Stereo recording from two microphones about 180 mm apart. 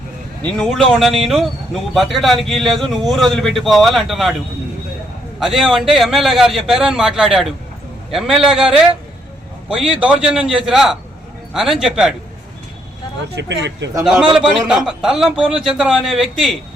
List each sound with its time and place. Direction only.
0.4 s speech: 5° left (ahead or behind)
5.4 s speech: centre (ahead or behind)
10.0 s speech: 5° right (ahead or behind)
13.3 s speech: 75° right (ahead or behind)
14.0 s speech: 5° right (ahead or behind)